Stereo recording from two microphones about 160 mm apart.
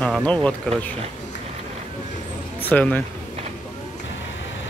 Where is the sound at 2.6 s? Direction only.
10° left (ahead or behind).